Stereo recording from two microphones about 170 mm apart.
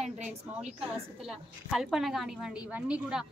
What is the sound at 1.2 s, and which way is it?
A woman's voice, centre (ahead or behind).